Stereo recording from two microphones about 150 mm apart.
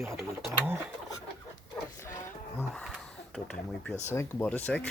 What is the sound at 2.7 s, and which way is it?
Speech, 5° left (ahead or behind).